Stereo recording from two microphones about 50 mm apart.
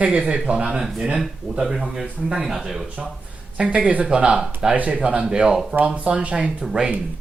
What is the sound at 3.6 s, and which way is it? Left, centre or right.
Speech, right.